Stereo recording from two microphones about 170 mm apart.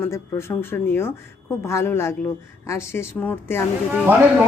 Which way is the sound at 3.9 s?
10° right (ahead or behind).